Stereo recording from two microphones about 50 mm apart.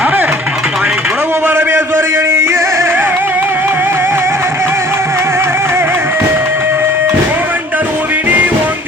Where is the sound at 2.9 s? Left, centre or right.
Right.